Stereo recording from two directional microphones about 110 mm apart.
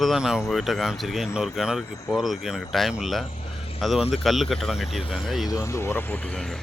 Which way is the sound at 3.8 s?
Centre (ahead or behind).